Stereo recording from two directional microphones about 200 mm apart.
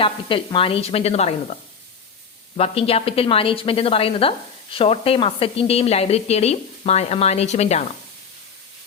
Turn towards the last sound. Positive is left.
turn(degrees=35)  # may be behind; listen again after turning